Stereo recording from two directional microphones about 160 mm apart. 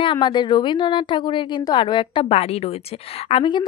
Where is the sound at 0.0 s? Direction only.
30° left (ahead or behind).